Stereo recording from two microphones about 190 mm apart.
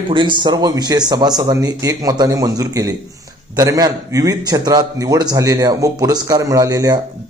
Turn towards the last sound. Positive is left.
turn(degrees=-20)  # may be behind; listen again after turning